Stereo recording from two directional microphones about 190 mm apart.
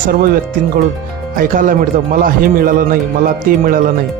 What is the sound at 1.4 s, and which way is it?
Speech, 45° right (ahead or behind).